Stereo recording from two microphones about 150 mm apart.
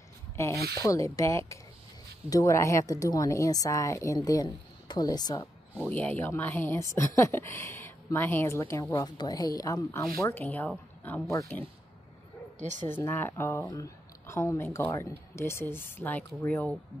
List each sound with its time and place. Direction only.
0.4 s speech: 20° left (ahead or behind)
5.9 s speech: 10° left (ahead or behind)
12.5 s a woman's voice: 55° right (ahead or behind)
12.9 s speech: 15° left (ahead or behind)